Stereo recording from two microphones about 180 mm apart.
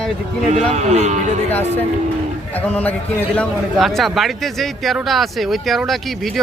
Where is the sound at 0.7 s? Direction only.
40° right (ahead or behind).